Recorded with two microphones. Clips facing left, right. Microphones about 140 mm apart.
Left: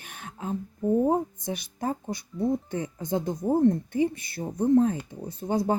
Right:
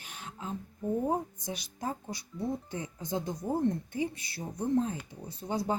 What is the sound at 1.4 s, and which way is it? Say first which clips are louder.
Speech: left 6 dB; 55° left (ahead or behind).